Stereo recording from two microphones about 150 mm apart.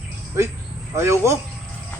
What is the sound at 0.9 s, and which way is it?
Speech, 20° right (ahead or behind).